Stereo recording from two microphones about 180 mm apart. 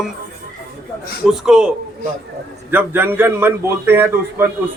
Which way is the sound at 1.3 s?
5° right (ahead or behind).